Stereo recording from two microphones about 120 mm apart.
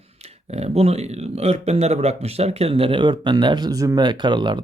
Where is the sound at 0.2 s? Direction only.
60° right (ahead or behind).